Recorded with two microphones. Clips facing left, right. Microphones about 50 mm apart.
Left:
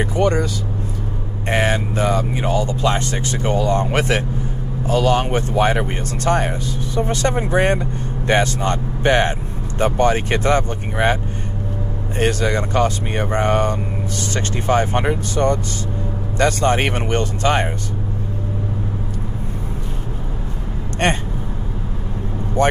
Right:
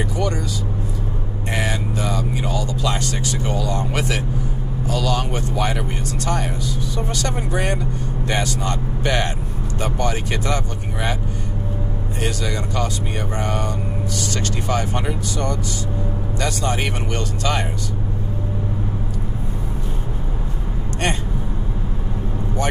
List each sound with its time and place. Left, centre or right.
0.0 s speech: left
1.5 s speech: left
12.2 s speech: left
21.0 s speech: left